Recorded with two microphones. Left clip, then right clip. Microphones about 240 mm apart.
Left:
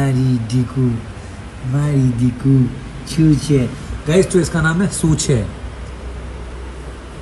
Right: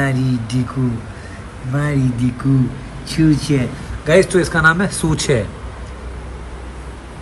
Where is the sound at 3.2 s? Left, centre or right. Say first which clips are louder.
Left 1 dB; centre.